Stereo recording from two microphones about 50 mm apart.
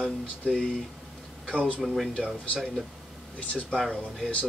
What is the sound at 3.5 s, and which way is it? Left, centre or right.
Speech, centre.